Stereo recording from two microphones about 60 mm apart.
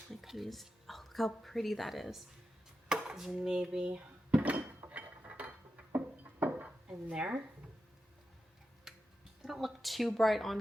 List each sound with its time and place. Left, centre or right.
0.1 s a woman's voice: centre
2.9 s dishes: centre
3.8 s a sound: right
4.9 s mechanisms: right
6.4 s dishes: right
7.1 s speech: centre
8.9 s a sound: centre
9.4 s a woman's voice: centre